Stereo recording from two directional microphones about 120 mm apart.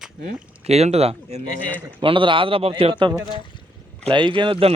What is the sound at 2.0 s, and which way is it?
A man's voice, 45° right (ahead or behind).